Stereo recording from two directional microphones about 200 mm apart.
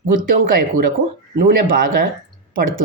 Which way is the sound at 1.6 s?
45° right (ahead or behind).